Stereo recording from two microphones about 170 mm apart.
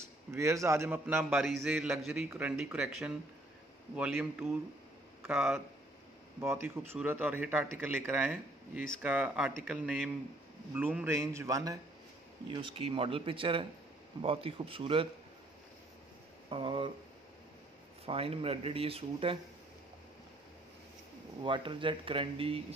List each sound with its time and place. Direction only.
0.3 s a man's voice: 15° right (ahead or behind)
12.5 s speech: 30° right (ahead or behind)
16.4 s speech: 30° right (ahead or behind)
18.0 s speech: 35° right (ahead or behind)
21.4 s speech: 30° right (ahead or behind)